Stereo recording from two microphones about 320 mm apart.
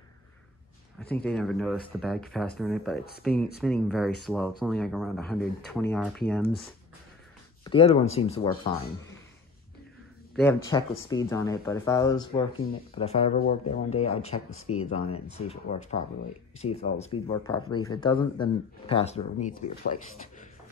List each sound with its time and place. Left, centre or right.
0.9 s speech: centre
7.6 s speech: centre
10.3 s speech: centre